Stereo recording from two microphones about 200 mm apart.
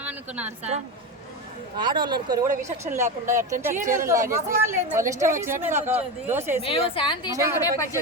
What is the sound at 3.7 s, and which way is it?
Speech, 40° right (ahead or behind).